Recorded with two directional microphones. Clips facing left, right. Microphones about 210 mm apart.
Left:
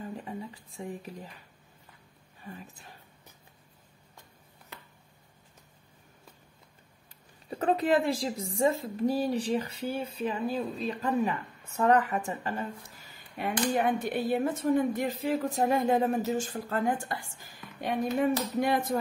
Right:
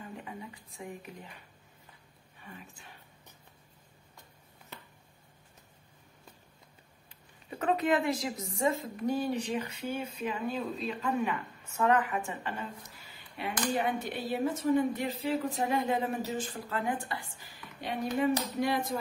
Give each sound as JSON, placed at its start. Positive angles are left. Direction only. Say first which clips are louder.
{"t": 0.0, "sound": "a sound", "louder": "left 5 dB", "side_deg": 35}
{"t": 2.4, "sound": "speech", "louder": "left 5 dB", "side_deg": 40}
{"t": 7.4, "sound": "a woman's voice", "louder": "left 2 dB", "side_deg": 35}